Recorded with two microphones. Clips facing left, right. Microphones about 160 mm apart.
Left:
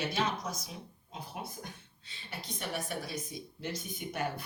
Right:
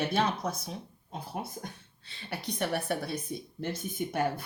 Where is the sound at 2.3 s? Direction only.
65° right (ahead or behind).